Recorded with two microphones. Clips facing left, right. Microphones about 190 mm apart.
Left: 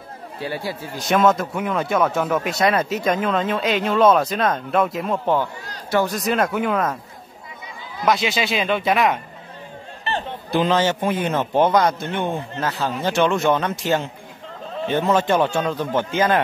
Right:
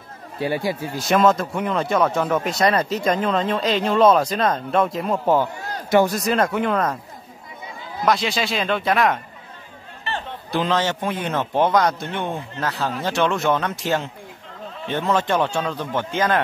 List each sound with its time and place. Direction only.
0.4 s speech: 15° right (ahead or behind)
1.0 s a man's voice: centre (ahead or behind)
5.1 s speech: 10° right (ahead or behind)
6.1 s a man's voice: centre (ahead or behind)
8.0 s a man's voice: centre (ahead or behind)
10.5 s a man's voice: 5° left (ahead or behind)